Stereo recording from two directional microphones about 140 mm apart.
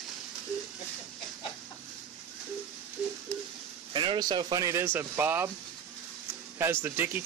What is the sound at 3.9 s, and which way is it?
Speech, 35° right (ahead or behind).